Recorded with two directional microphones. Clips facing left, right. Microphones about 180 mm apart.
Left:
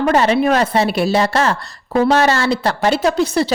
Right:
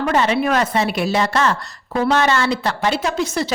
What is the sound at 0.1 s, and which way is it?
A woman's voice, 40° left (ahead or behind).